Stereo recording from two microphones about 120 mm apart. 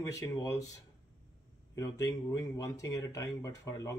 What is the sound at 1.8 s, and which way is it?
Speech, 30° left (ahead or behind).